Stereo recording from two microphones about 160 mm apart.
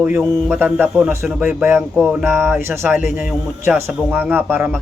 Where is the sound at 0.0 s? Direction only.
10° right (ahead or behind).